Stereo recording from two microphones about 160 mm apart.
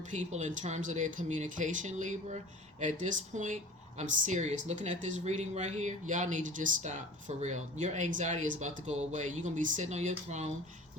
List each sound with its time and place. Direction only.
0.1 s speech: 45° right (ahead or behind)